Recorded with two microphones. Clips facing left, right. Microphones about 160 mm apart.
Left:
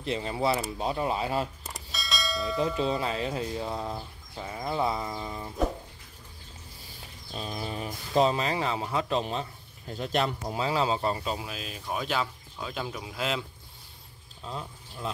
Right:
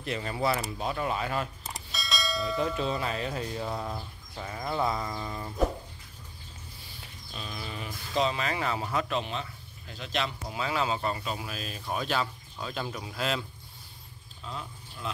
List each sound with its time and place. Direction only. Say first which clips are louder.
0.0 s speech: left 2 dB; 25° left (ahead or behind)
1.6 s bell: even; centre (ahead or behind)
2.6 s speech: left 4 dB; 20° left (ahead or behind)
7.3 s speech: left 5 dB; 35° left (ahead or behind)
8.4 s speech: left 2 dB; 30° left (ahead or behind)
9.2 s speech: left 3 dB; 40° left (ahead or behind)
10.6 s speech: left 3 dB; 30° left (ahead or behind); by 13.5 s 15° left (ahead or behind)
14.4 s speech: left 2 dB; 35° left (ahead or behind)